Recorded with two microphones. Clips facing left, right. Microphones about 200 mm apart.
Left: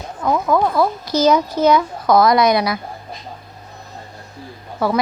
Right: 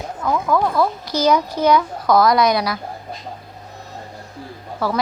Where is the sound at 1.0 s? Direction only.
15° right (ahead or behind).